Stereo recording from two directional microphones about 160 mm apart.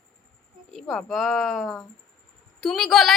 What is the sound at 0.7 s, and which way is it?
A woman's voice, centre (ahead or behind).